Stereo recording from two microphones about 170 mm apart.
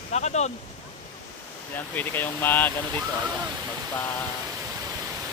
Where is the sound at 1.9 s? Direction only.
10° left (ahead or behind).